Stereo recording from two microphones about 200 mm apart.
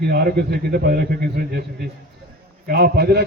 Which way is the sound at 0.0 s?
50° right (ahead or behind).